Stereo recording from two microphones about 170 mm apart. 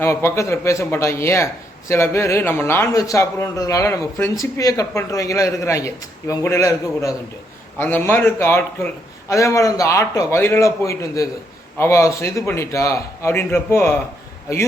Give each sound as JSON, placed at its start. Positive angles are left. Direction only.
{"t": 0.0, "sound": "a man's voice", "side_deg": 15}